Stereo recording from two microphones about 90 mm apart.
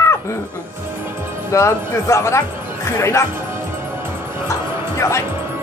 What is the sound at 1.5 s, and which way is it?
Speech, 30° left (ahead or behind).